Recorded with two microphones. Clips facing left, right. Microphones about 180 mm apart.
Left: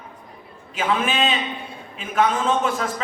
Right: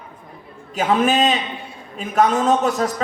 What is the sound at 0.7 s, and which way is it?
A man's voice, 40° right (ahead or behind).